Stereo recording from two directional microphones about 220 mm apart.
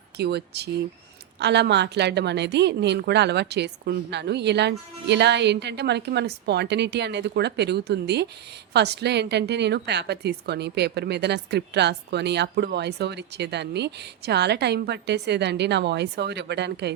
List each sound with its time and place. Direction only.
0.2 s a woman's voice: 50° right (ahead or behind)